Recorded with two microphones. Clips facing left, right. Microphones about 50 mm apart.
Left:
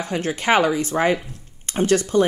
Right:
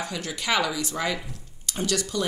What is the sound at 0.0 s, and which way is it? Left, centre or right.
Speech, left.